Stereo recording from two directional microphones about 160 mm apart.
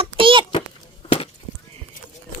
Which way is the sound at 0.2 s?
30° right (ahead or behind).